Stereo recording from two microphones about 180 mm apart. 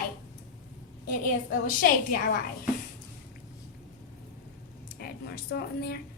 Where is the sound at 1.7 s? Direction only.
55° left (ahead or behind).